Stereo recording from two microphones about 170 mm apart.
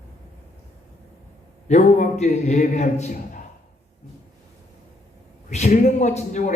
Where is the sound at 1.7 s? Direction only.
45° left (ahead or behind).